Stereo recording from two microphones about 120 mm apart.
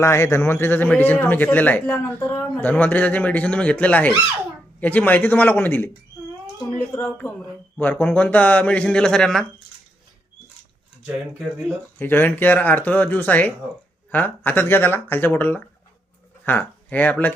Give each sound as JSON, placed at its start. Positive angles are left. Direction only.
{"t": 0.0, "sound": "a man's voice", "side_deg": 25}
{"t": 11.9, "sound": "a man's voice", "side_deg": 15}